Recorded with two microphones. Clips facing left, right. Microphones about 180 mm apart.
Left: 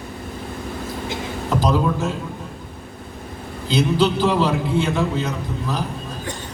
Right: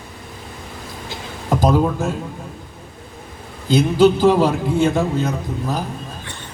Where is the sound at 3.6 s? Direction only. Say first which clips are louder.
Right 5 dB; 50° right (ahead or behind).